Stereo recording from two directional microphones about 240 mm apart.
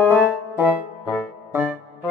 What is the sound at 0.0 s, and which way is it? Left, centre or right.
Music, centre.